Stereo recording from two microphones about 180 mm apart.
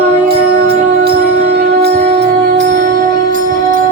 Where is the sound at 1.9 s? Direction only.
35° right (ahead or behind).